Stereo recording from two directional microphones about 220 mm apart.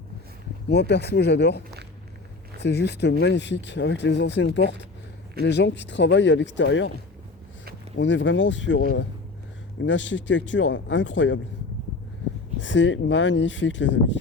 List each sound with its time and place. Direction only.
0.7 s speech: 50° left (ahead or behind)
7.9 s speech: 55° left (ahead or behind)
12.5 s speech: 55° left (ahead or behind)